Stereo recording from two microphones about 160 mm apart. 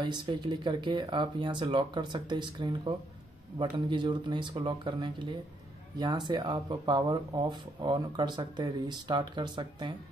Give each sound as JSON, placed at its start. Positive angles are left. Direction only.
{"t": 0.0, "sound": "speech", "side_deg": -30}